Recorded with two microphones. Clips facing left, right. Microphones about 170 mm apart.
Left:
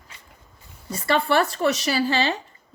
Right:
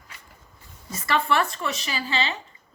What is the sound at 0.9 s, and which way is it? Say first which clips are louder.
Speech: left 3 dB; 30° left (ahead or behind).